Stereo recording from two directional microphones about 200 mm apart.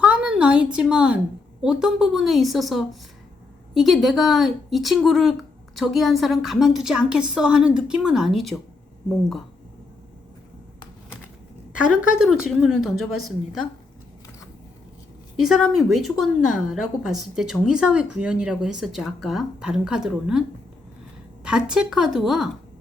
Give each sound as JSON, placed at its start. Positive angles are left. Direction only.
{"t": 0.0, "sound": "a woman's voice", "side_deg": -5}
{"t": 11.9, "sound": "a woman's voice", "side_deg": -5}
{"t": 15.4, "sound": "a woman's voice", "side_deg": 0}
{"t": 21.7, "sound": "a woman's voice", "side_deg": -5}